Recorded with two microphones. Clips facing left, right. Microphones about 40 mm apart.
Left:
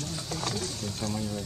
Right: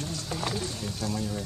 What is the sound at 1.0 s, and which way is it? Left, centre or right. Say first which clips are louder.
Speech: right 1 dB; centre.